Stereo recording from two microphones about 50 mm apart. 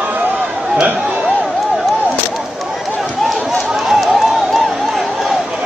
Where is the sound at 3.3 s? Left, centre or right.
Centre.